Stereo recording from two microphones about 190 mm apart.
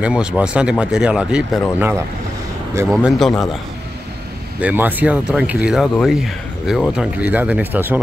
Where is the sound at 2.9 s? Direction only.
Centre (ahead or behind).